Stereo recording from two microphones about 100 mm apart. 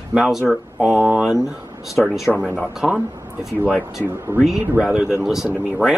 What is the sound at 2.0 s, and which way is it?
Speech, 10° left (ahead or behind).